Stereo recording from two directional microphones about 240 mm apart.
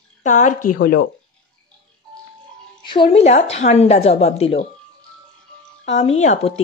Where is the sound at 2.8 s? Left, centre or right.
Centre.